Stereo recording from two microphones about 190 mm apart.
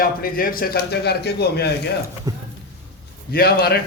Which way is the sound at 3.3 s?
55° left (ahead or behind).